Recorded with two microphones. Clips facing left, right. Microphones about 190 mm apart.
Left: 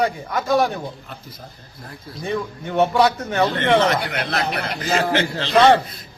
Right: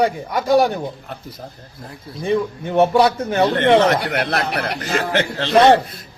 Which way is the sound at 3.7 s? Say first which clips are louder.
Right 3 dB; 45° right (ahead or behind).